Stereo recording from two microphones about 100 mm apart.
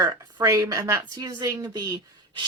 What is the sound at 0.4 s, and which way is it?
A woman's voice, 35° right (ahead or behind).